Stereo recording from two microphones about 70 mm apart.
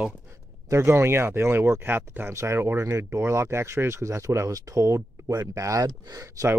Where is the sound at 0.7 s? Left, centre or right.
Right.